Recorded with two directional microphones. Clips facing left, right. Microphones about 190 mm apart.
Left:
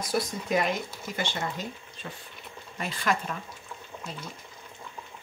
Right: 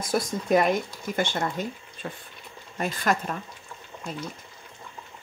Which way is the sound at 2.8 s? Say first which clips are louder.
Right 3 dB; 45° right (ahead or behind).